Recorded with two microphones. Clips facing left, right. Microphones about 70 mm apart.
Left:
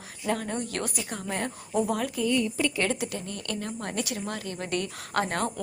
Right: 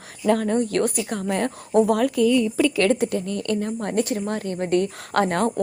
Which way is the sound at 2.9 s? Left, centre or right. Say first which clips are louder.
Right 10 dB; right.